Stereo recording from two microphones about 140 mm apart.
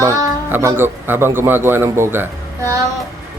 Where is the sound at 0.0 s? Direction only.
20° right (ahead or behind).